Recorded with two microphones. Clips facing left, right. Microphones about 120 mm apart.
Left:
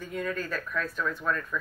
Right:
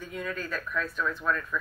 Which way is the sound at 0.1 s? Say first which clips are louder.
Left 3 dB; 50° left (ahead or behind).